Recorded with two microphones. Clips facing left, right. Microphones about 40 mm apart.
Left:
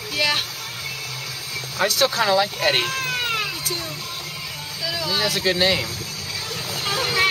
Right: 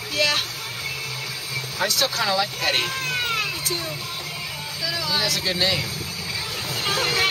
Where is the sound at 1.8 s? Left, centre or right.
Centre.